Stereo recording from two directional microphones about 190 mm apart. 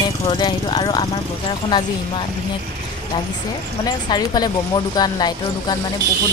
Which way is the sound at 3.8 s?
20° left (ahead or behind).